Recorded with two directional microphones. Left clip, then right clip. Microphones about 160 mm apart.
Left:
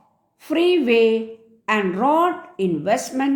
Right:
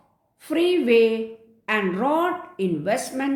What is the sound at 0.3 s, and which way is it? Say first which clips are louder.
A woman's voice: left 3 dB; 30° left (ahead or behind).